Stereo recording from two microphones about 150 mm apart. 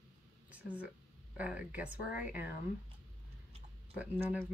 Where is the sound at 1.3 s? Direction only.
10° right (ahead or behind).